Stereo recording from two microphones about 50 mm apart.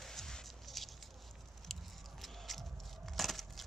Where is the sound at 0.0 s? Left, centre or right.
Centre.